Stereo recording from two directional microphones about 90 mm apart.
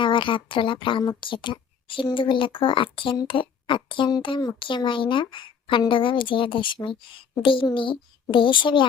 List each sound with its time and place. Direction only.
0.0 s a woman's voice: 65° left (ahead or behind)